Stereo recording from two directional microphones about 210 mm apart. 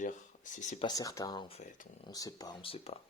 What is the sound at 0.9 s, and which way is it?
Speech, 15° left (ahead or behind).